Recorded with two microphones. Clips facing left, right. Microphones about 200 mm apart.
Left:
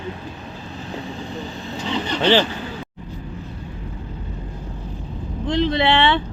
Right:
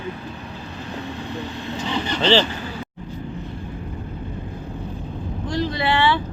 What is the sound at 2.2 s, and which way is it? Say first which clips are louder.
Speech: left 1 dB; 15° left (ahead or behind).